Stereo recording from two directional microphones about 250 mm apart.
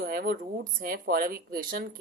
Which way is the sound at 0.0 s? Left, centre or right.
Right.